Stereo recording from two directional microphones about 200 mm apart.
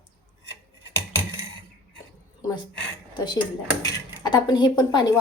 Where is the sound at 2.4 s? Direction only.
20° left (ahead or behind).